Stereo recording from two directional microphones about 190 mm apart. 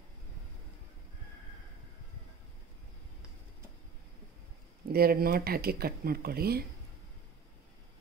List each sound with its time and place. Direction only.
4.9 s speech: 50° right (ahead or behind)